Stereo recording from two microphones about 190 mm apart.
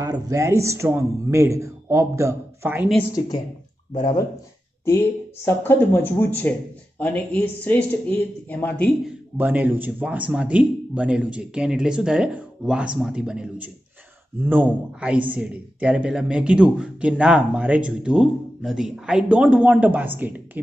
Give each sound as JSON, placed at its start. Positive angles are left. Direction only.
{"t": 0.0, "sound": "a man's voice", "side_deg": -20}
{"t": 3.9, "sound": "speech", "side_deg": 20}
{"t": 9.4, "sound": "a man's voice", "side_deg": -10}